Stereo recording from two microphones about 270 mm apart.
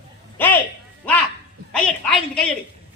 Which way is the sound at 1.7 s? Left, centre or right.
Centre.